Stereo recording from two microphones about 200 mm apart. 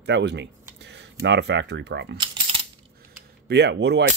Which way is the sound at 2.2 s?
30° right (ahead or behind).